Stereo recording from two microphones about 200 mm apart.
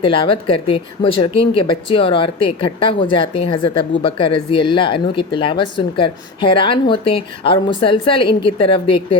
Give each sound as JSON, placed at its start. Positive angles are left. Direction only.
{"t": 0.0, "sound": "speech", "side_deg": 25}